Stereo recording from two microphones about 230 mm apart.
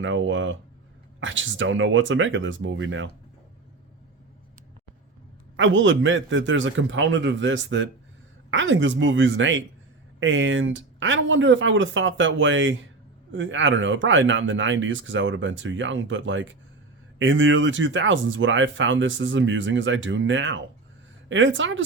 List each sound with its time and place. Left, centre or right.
0.0 s speech: right
5.5 s speech: right